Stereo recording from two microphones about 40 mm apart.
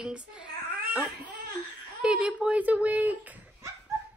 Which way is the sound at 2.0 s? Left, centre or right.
Right.